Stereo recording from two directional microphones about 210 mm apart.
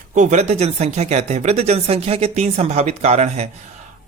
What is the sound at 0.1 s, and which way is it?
Speech, 35° right (ahead or behind).